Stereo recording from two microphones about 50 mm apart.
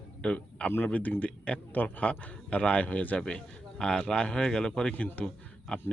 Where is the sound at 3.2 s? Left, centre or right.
Centre.